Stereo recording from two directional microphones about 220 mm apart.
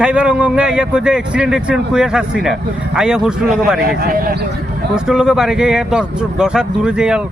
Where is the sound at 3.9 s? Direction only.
40° right (ahead or behind).